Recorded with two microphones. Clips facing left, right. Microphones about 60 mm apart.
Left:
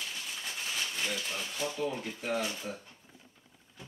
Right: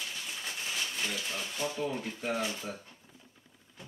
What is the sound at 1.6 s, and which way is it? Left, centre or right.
Speech, centre.